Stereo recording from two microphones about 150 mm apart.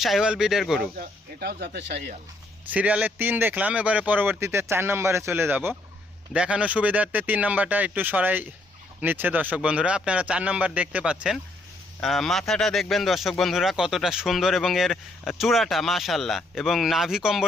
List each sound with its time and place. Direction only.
0.0 s speech: centre (ahead or behind)
0.8 s speech: 90° right
2.6 s speech: 10° right (ahead or behind)